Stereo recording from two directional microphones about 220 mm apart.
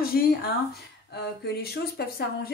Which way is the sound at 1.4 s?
45° left (ahead or behind).